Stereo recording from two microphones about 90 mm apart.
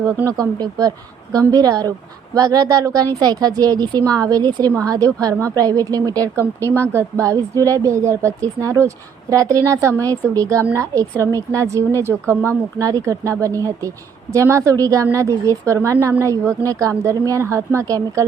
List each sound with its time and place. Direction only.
0.3 s a woman's voice: 40° right (ahead or behind)
4.8 s a woman's voice: 35° right (ahead or behind)
6.4 s speech: 25° left (ahead or behind)
6.9 s a woman's voice: 35° right (ahead or behind)